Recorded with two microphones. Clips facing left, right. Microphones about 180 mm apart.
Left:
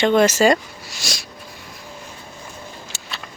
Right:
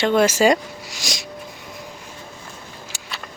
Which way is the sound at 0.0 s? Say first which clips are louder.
Left 1 dB; 5° right (ahead or behind).